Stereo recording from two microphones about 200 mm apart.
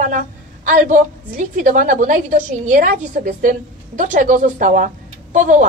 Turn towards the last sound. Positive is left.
turn(degrees=-40)  # may be behind; listen again after turning